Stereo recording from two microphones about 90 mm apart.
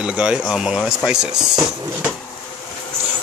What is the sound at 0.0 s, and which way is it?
Speech, 10° right (ahead or behind).